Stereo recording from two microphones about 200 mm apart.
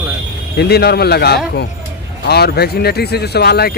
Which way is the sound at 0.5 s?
55° left (ahead or behind).